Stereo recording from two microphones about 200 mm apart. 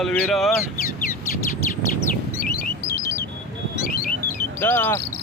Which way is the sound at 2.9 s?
15° left (ahead or behind).